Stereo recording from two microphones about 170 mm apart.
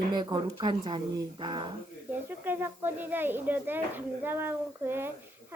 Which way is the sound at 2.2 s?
10° right (ahead or behind).